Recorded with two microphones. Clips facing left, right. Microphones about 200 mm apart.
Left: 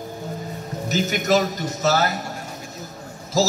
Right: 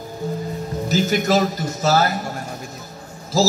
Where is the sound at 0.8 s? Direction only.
35° right (ahead or behind).